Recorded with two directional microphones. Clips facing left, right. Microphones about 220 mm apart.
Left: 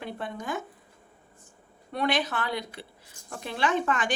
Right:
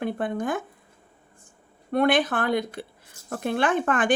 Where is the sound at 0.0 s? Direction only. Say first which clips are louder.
Right 9 dB; 50° right (ahead or behind).